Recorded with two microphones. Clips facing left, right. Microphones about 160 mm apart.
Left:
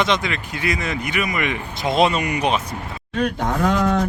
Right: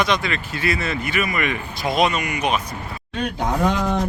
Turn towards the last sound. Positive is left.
turn(degrees=0)  # may be behind; listen again after turning